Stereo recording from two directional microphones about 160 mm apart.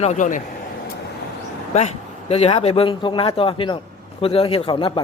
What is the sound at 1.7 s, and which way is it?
A man's voice, 40° left (ahead or behind).